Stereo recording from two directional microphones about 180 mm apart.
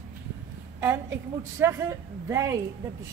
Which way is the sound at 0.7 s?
15° right (ahead or behind).